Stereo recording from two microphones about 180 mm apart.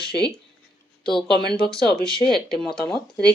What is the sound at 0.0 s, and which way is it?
Speech, 5° left (ahead or behind).